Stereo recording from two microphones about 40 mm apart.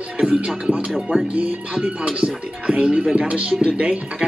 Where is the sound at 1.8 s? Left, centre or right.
Right.